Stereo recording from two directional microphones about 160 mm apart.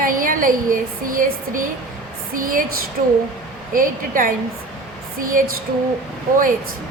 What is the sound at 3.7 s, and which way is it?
Speech, 60° right (ahead or behind).